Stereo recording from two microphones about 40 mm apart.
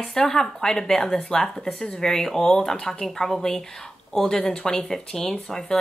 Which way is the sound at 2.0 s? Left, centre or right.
Centre.